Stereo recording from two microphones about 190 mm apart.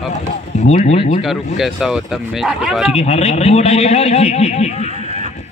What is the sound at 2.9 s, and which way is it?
A man's voice, 35° left (ahead or behind).